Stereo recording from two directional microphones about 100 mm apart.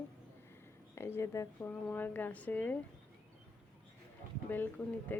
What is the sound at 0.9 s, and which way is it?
Speech, 25° left (ahead or behind).